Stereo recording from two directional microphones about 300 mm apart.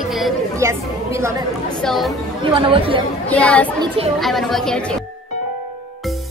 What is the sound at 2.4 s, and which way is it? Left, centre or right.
Speech, centre.